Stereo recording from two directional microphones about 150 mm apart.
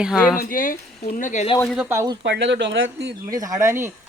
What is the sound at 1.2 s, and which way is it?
Speech, 55° left (ahead or behind).